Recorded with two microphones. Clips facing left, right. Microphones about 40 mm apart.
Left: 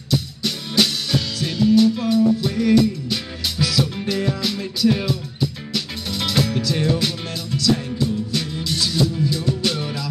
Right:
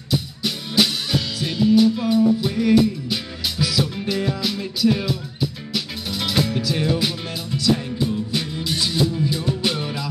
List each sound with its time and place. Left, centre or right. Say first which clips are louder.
0.1 s music: left 1 dB; centre